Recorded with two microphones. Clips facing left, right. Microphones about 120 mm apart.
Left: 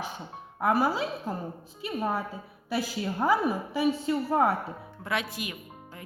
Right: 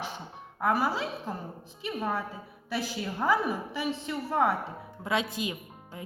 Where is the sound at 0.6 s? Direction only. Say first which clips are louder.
Left 2 dB; 30° left (ahead or behind).